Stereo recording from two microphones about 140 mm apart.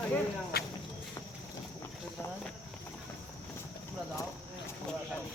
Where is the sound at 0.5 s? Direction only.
90° left.